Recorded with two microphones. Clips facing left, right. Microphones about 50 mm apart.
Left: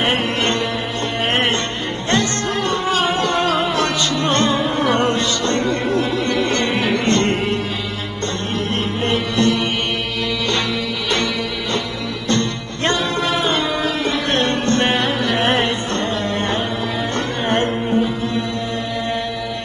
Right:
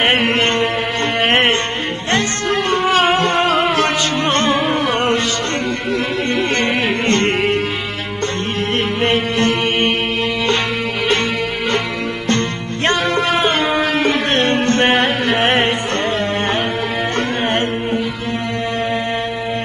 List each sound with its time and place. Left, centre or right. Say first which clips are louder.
0.0 s music: right 4 dB; right
9.0 s music: right 1 dB; right
12.3 s music: even; right